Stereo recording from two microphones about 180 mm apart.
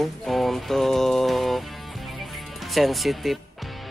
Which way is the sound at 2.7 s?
Centre (ahead or behind).